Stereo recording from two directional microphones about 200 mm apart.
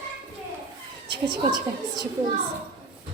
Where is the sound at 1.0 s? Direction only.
25° right (ahead or behind).